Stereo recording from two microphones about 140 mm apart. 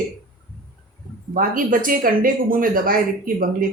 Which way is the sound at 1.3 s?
80° right.